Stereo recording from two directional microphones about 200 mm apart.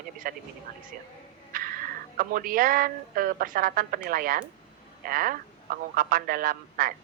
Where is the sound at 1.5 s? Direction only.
45° right (ahead or behind).